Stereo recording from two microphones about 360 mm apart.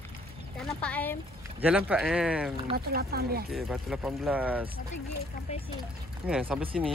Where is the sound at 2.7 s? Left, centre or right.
Right.